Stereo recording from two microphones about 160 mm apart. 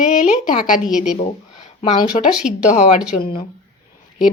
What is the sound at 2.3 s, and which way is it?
Speech, 5° right (ahead or behind).